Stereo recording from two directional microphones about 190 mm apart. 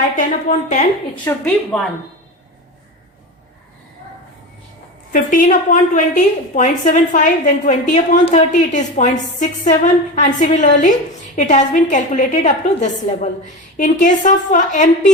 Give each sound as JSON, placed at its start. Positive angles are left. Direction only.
{"t": 0.2, "sound": "a woman's voice", "side_deg": 40}
{"t": 1.2, "sound": "speech", "side_deg": 10}
{"t": 5.1, "sound": "a woman's voice", "side_deg": 45}